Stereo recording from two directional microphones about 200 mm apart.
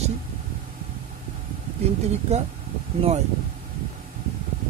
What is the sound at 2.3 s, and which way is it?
Speech, 35° right (ahead or behind).